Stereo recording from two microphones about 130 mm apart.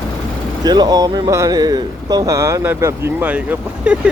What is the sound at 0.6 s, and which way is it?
Speech, 30° right (ahead or behind).